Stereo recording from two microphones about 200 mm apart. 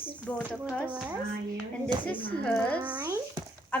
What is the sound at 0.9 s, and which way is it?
Speech, 5° right (ahead or behind).